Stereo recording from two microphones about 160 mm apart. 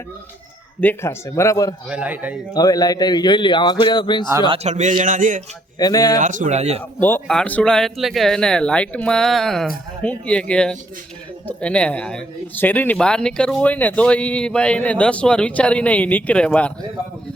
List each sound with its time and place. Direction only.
0.8 s speech: 15° left (ahead or behind)
1.9 s a man's voice: 10° right (ahead or behind)
2.5 s a man's voice: 25° left (ahead or behind)
4.4 s a man's voice: 40° right (ahead or behind)
5.8 s a man's voice: 20° left (ahead or behind)
6.1 s a man's voice: 55° right (ahead or behind)
7.0 s speech: 10° left (ahead or behind)